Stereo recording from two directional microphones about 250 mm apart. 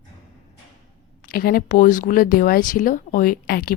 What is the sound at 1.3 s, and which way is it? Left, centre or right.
Speech, left.